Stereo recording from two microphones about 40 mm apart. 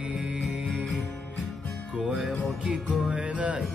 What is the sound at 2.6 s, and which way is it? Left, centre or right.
Music, right.